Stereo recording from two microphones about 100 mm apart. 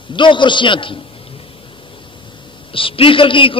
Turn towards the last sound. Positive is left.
turn(degrees=60)  # may be behind; listen again after turning